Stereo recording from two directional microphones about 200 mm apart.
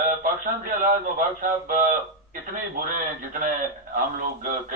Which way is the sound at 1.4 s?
45° right (ahead or behind).